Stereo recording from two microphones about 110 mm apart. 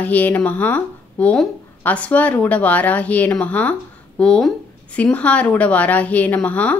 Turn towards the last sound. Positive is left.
turn(degrees=15)  # may be behind; listen again after turning